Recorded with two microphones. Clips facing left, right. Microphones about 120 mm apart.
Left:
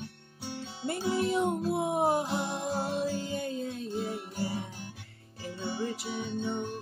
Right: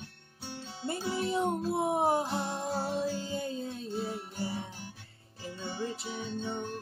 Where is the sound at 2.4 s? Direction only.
20° left (ahead or behind).